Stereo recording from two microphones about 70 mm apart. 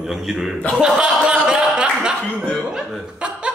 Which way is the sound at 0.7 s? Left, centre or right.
Centre.